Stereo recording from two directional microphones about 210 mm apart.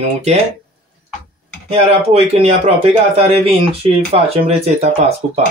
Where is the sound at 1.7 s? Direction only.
30° right (ahead or behind).